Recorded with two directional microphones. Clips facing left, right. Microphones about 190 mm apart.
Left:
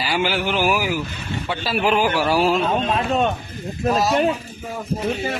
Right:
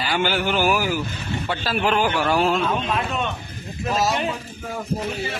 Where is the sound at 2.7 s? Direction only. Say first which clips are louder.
Left 4 dB; 40° left (ahead or behind).